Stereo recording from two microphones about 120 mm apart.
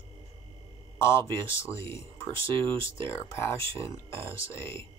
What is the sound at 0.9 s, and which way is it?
Speech, 20° left (ahead or behind).